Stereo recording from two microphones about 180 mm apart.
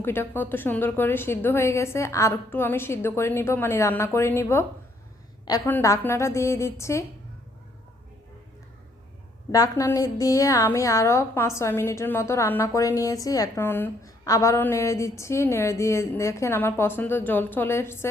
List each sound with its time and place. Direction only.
0.0 s a woman's voice: 10° left (ahead or behind)
5.6 s a woman's voice: 15° left (ahead or behind)
9.5 s a woman's voice: 20° left (ahead or behind)